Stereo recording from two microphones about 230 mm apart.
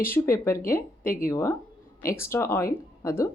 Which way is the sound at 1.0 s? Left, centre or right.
Left.